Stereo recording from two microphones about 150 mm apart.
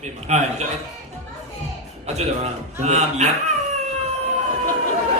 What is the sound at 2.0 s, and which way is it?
A man's voice, 45° right (ahead or behind).